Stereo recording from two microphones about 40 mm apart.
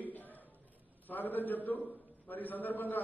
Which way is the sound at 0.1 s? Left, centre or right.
Left.